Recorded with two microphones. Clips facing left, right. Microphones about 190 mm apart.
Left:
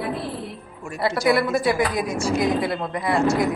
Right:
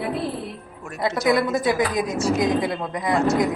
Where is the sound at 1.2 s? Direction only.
20° right (ahead or behind).